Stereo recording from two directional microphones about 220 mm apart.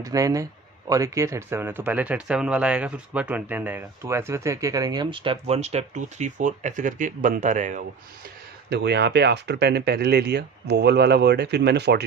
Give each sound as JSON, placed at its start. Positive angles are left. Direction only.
{"t": 0.0, "sound": "speech", "side_deg": -15}
{"t": 8.7, "sound": "speech", "side_deg": -50}